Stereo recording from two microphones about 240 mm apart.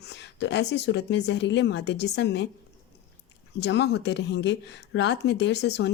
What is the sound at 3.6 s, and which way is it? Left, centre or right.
Speech, left.